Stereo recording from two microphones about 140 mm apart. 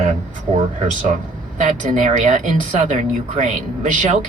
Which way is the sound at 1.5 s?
60° right (ahead or behind).